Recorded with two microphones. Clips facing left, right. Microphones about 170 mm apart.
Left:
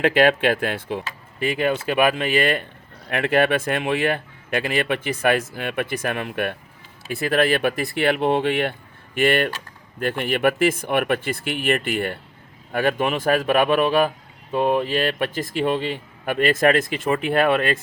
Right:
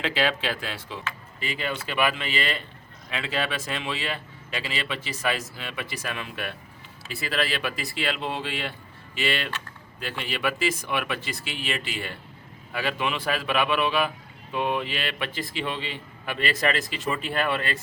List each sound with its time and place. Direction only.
0.0 s speech: 55° left (ahead or behind)